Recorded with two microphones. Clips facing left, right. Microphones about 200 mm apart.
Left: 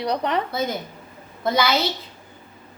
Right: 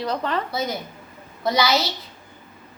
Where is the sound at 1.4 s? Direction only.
50° left (ahead or behind).